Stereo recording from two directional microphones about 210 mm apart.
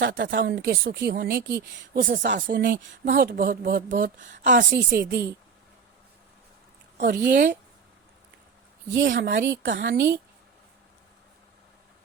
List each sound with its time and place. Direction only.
0.1 s speech: 45° right (ahead or behind)
3.0 s speech: 40° right (ahead or behind)
7.0 s speech: 40° right (ahead or behind)
9.0 s speech: 60° right (ahead or behind)